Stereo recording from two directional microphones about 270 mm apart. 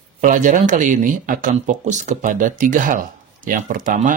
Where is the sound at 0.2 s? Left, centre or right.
Right.